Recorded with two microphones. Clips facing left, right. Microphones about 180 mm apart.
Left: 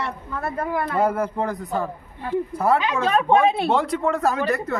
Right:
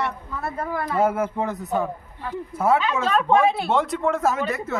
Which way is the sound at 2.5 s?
Centre (ahead or behind).